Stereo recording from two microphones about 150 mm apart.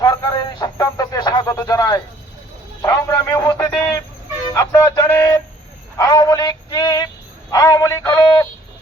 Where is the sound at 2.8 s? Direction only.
20° left (ahead or behind).